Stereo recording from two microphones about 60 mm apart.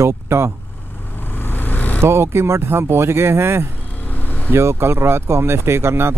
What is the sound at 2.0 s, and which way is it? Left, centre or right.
Speech, right.